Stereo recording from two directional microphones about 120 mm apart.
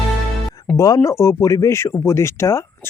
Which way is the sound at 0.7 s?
30° left (ahead or behind).